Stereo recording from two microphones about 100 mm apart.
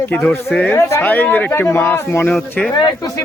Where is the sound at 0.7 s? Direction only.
25° left (ahead or behind).